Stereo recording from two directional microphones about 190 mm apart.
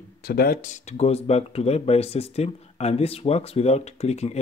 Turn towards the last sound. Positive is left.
turn(degrees=35)  # may be behind; listen again after turning